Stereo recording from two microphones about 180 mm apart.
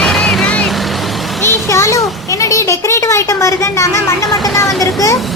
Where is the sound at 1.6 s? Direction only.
15° left (ahead or behind).